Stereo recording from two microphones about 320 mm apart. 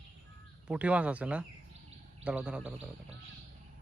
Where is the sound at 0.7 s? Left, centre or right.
Centre.